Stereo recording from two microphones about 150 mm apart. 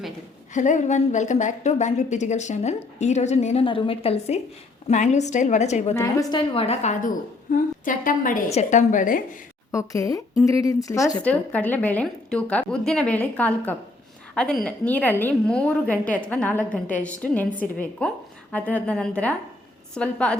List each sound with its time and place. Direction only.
0.5 s a woman's voice: 55° left (ahead or behind)
4.9 s a woman's voice: 50° left (ahead or behind)
5.9 s a woman's voice: 20° left (ahead or behind)
6.5 s a woman's voice: 45° left (ahead or behind)
7.5 s a woman's voice: 65° left (ahead or behind)
9.7 s a woman's voice: 25° left (ahead or behind)
11.2 s a woman's voice: 10° left (ahead or behind)